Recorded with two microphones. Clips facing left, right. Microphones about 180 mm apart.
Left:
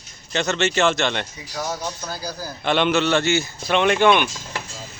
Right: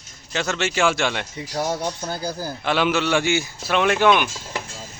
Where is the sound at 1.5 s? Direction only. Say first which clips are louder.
Right 4 dB; 30° right (ahead or behind).